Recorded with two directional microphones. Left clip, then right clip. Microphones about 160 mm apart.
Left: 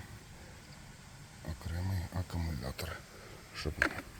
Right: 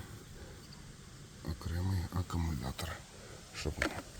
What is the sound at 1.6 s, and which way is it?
Speech, centre (ahead or behind).